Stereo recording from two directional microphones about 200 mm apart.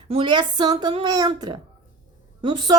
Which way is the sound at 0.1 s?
25° right (ahead or behind).